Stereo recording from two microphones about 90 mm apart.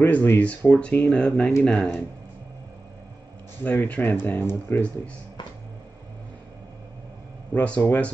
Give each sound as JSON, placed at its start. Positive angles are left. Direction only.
{"t": 0.0, "sound": "speech", "side_deg": 25}
{"t": 3.6, "sound": "speech", "side_deg": 20}
{"t": 7.5, "sound": "speech", "side_deg": 15}